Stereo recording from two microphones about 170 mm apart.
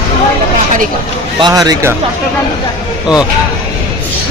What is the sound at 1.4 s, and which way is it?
Speech, 20° right (ahead or behind).